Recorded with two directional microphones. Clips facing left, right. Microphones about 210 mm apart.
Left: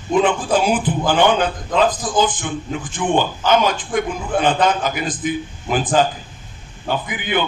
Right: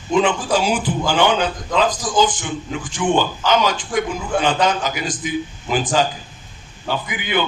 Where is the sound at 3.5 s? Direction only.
55° left (ahead or behind).